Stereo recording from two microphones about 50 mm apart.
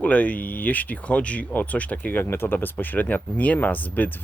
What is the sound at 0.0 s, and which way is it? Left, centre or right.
Speech, left.